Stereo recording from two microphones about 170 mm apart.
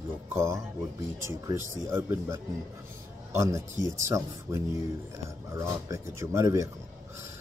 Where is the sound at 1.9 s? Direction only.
15° right (ahead or behind).